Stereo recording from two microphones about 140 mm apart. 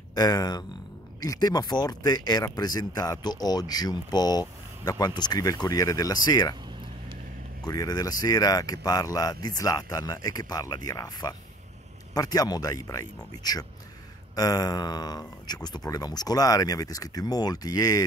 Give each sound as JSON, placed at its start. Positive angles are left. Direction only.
{"t": 0.1, "sound": "speech", "side_deg": 25}
{"t": 7.6, "sound": "speech", "side_deg": 25}